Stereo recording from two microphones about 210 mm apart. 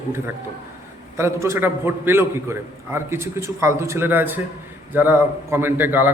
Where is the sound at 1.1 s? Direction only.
15° right (ahead or behind).